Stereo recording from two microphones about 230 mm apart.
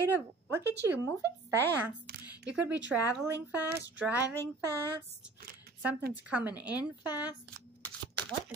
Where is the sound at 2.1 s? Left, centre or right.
Right.